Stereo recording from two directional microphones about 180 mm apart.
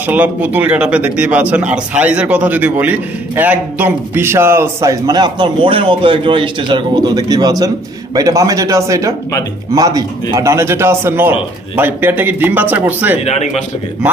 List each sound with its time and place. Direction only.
0.0 s speech: 10° right (ahead or behind)
13.2 s speech: 35° left (ahead or behind)